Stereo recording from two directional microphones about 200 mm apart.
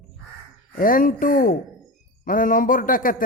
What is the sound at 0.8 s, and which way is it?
A man's voice, 45° left (ahead or behind).